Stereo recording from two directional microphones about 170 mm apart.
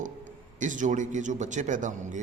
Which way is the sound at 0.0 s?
50° right (ahead or behind).